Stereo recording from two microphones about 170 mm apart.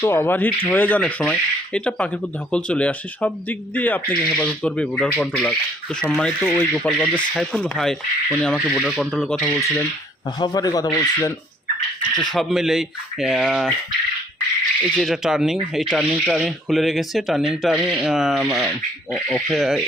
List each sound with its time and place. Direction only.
0.0 s speech: 15° left (ahead or behind)
9.6 s speech: 20° left (ahead or behind)
12.3 s speech: centre (ahead or behind)
14.9 s speech: centre (ahead or behind)